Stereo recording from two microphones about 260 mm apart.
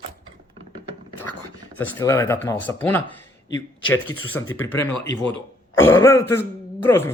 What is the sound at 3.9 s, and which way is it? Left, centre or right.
Speech, left.